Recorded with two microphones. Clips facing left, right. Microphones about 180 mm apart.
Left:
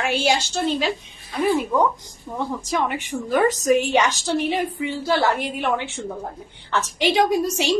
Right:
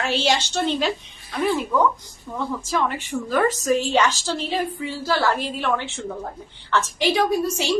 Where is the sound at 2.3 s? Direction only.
15° left (ahead or behind).